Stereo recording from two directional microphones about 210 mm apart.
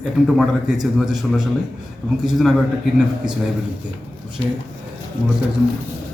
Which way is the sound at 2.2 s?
Centre (ahead or behind).